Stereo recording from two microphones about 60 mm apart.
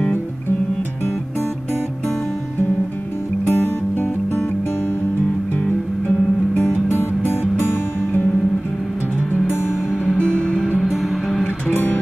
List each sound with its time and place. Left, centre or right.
3.4 s music: left
6.9 s music: left
9.3 s music: left
9.7 s music: centre
10.1 s music: centre
10.8 s music: centre
11.4 s music: left